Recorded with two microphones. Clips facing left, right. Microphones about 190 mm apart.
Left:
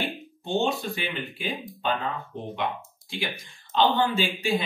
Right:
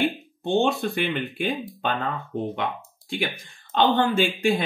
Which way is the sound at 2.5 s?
55° right (ahead or behind).